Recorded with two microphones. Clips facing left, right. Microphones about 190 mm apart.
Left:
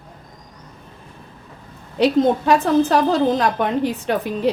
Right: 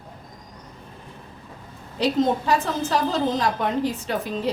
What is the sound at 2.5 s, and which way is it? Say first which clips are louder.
A woman's voice: left 7 dB; 60° left (ahead or behind).